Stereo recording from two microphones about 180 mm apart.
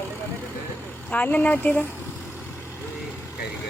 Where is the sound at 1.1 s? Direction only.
10° left (ahead or behind).